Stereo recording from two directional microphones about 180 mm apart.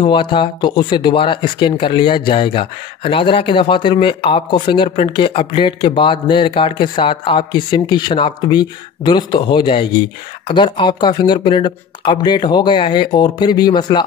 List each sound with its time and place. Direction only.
0.0 s speech: 25° left (ahead or behind)